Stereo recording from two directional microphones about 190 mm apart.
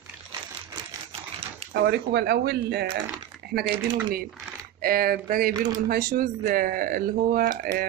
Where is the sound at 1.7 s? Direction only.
65° right (ahead or behind).